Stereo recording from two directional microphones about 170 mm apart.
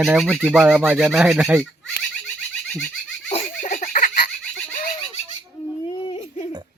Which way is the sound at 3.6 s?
50° left (ahead or behind).